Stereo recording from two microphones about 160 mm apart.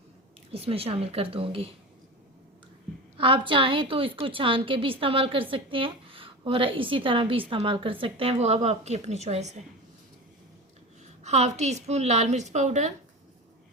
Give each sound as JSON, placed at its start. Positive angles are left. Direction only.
{"t": 0.5, "sound": "a woman's voice", "side_deg": -35}
{"t": 3.2, "sound": "a woman's voice", "side_deg": -35}
{"t": 11.2, "sound": "a woman's voice", "side_deg": -45}